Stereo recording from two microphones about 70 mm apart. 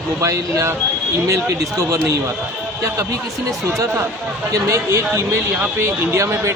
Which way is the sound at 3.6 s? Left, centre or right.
Right.